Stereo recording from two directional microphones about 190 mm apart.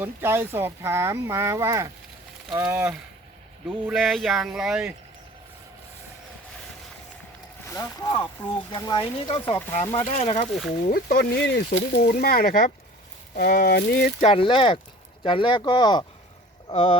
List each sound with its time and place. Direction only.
0.0 s speech: 10° right (ahead or behind)
3.8 s speech: centre (ahead or behind)
7.7 s speech: 20° left (ahead or behind)
9.4 s speech: 10° left (ahead or behind)
9.6 s speech: 30° left (ahead or behind)
10.7 s speech: 55° left (ahead or behind)
11.9 s speech: 50° left (ahead or behind)
14.2 s speech: 30° left (ahead or behind)